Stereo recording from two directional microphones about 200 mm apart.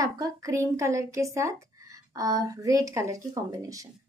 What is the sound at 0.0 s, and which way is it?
Speech, 15° right (ahead or behind).